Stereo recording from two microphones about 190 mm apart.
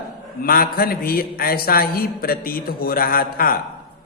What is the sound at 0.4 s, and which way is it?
A man's voice, 50° left (ahead or behind).